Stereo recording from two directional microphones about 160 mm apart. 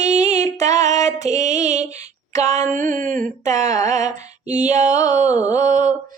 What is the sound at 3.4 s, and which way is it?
Mantra, 50° right (ahead or behind).